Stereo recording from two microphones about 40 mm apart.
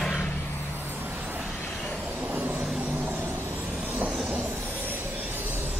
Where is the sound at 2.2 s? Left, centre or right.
Right.